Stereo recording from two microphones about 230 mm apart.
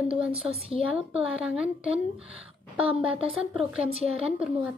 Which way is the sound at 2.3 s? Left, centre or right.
Left.